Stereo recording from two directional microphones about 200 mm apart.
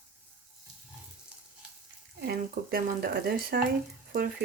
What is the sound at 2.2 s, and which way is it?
Speech, 50° right (ahead or behind).